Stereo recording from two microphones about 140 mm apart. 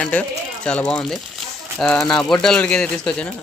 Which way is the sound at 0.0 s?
10° left (ahead or behind).